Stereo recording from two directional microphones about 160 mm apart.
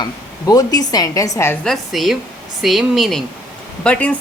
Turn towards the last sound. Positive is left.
turn(degrees=10)  # may be behind; listen again after turning